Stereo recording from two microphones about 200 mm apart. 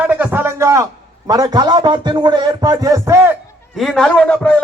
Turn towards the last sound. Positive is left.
turn(degrees=5)  # may be behind; listen again after turning